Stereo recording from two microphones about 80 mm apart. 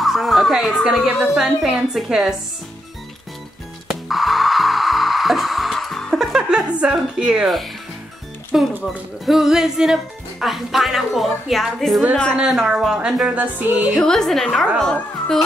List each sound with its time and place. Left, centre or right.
0.0 s a sound: centre
1.0 s a woman's voice: centre
3.8 s music: centre
8.5 s a woman's voice: centre
13.4 s music: right
13.9 s a woman's voice: centre